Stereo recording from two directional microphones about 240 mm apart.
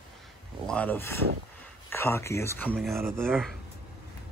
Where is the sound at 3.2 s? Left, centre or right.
Centre.